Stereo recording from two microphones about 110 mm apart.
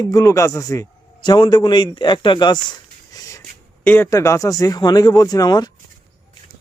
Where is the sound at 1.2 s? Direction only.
45° left (ahead or behind).